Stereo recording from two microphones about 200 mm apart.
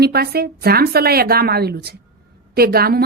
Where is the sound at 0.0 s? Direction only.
50° right (ahead or behind).